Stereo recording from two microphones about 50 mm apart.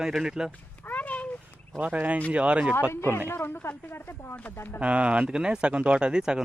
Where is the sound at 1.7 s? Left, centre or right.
Right.